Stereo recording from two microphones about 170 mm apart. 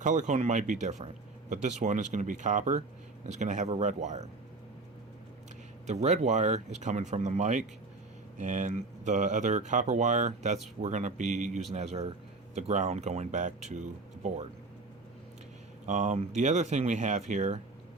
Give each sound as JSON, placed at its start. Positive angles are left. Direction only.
{"t": 0.0, "sound": "speech", "side_deg": -45}
{"t": 5.8, "sound": "speech", "side_deg": -40}
{"t": 15.9, "sound": "speech", "side_deg": -45}